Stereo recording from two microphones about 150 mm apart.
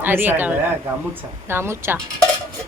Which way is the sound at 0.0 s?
15° right (ahead or behind).